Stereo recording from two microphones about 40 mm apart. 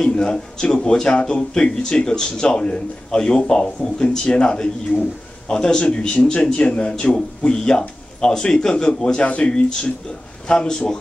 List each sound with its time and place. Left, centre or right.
0.0 s speech: centre
5.8 s speech: left